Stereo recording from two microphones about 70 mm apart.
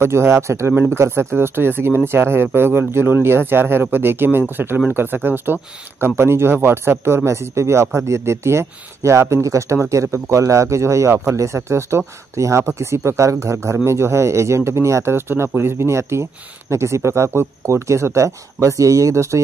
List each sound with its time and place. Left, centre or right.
0.0 s speech: right